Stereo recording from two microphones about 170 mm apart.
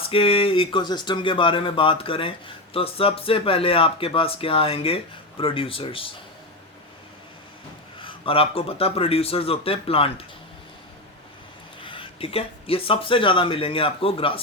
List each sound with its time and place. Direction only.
0.0 s speech: 35° left (ahead or behind)
8.0 s speech: 30° left (ahead or behind)
11.8 s speech: 30° left (ahead or behind)